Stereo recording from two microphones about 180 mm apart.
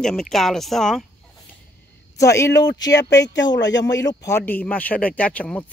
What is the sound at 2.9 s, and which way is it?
Speech, 75° left (ahead or behind).